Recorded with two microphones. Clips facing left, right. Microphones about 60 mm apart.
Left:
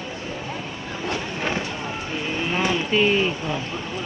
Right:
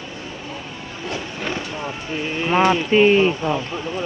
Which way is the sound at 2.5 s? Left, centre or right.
Right.